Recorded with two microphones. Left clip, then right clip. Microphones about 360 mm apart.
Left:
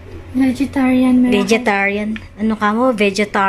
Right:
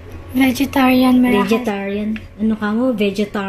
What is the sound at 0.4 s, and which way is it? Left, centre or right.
Speech, right.